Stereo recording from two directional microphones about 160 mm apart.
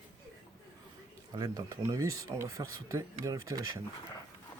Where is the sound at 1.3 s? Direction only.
20° right (ahead or behind).